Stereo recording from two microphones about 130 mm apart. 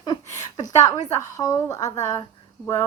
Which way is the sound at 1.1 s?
25° left (ahead or behind).